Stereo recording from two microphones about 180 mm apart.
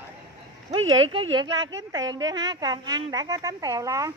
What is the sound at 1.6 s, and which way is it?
Speech, 90° right.